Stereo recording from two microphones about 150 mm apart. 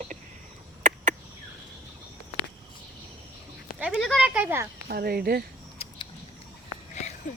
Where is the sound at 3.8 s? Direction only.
5° right (ahead or behind).